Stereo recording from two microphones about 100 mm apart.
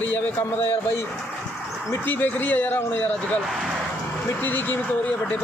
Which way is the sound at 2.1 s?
20° left (ahead or behind).